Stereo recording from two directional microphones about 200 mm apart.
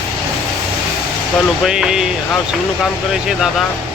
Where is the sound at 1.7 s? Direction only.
5° right (ahead or behind).